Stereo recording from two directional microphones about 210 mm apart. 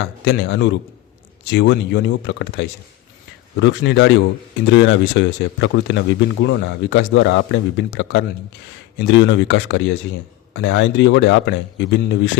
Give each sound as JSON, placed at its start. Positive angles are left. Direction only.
{"t": 0.0, "sound": "speech", "side_deg": 55}